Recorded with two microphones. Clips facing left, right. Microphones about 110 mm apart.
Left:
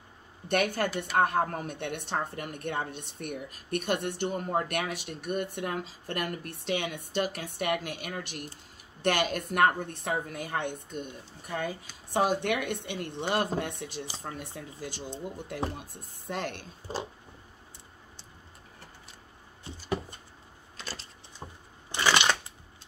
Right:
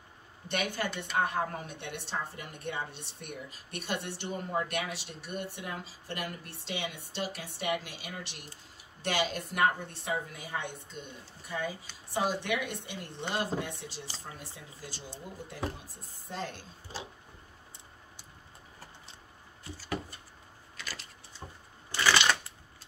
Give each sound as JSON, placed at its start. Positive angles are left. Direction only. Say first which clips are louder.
{"t": 0.5, "sound": "a woman's voice", "louder": "left 6 dB", "side_deg": 50}
{"t": 15.8, "sound": "a woman's voice", "louder": "left 4 dB", "side_deg": 65}
{"t": 19.6, "sound": "cupboard open or close", "louder": "left 4 dB", "side_deg": 20}
{"t": 20.7, "sound": "a sound", "louder": "left 2 dB", "side_deg": 30}
{"t": 21.4, "sound": "vehicle", "louder": "left 2 dB", "side_deg": 25}
{"t": 21.9, "sound": "shuffling cards", "louder": "left 1 dB", "side_deg": 20}